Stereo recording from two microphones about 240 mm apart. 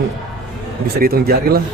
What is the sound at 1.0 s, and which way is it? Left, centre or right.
Speech, right.